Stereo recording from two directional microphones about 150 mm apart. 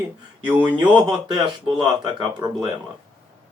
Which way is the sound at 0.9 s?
30° right (ahead or behind).